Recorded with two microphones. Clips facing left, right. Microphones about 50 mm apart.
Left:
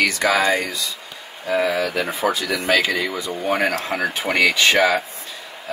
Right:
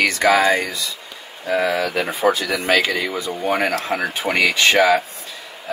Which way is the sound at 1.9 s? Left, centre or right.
Right.